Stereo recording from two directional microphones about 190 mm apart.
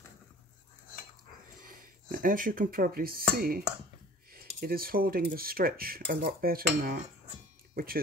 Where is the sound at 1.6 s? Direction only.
45° right (ahead or behind).